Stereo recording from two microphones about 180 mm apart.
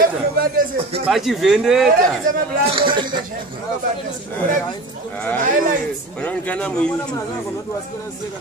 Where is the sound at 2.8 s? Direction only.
25° right (ahead or behind).